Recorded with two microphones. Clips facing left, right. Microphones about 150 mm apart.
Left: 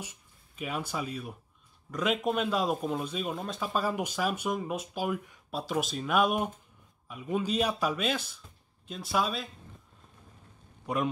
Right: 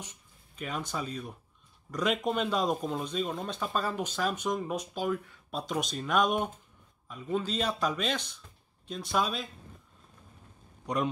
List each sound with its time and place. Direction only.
0.6 s speech: 10° left (ahead or behind)